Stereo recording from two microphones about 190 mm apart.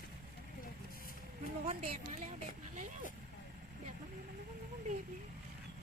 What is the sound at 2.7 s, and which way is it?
Vehicle, 45° right (ahead or behind).